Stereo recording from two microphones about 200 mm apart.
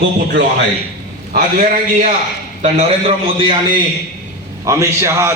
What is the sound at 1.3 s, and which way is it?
A man's voice, 45° right (ahead or behind).